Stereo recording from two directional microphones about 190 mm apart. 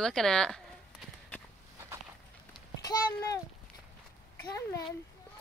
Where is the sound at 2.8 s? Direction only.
20° left (ahead or behind).